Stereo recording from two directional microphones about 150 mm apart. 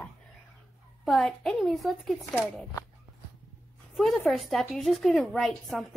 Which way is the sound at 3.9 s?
Centre (ahead or behind).